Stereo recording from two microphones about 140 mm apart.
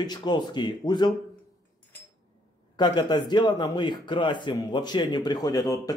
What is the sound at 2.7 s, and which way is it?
A man's voice, 30° left (ahead or behind).